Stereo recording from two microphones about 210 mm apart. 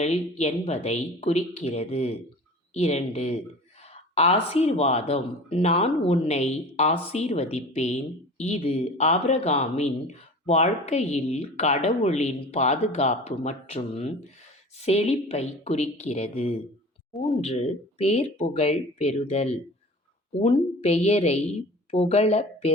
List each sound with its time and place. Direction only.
0.0 s speech: 30° left (ahead or behind)
17.2 s speech: centre (ahead or behind)
17.4 s a woman's voice: 30° left (ahead or behind)